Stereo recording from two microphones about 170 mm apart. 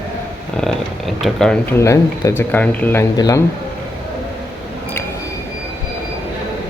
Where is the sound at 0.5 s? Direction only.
Centre (ahead or behind).